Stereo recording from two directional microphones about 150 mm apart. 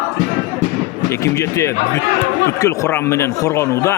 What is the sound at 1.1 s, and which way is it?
Speech, 20° left (ahead or behind).